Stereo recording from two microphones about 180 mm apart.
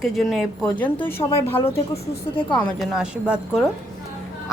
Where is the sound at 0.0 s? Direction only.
Centre (ahead or behind).